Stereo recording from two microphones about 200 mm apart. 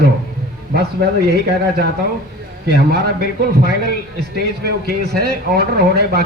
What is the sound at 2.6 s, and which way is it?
Speech, 55° right (ahead or behind).